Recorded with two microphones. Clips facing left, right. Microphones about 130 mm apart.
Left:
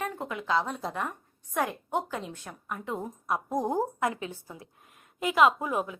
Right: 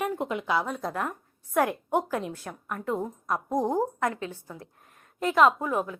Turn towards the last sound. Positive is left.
turn(degrees=15)  # may be behind; listen again after turning